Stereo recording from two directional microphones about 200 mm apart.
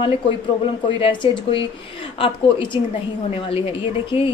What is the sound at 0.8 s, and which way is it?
A woman's voice, 25° left (ahead or behind).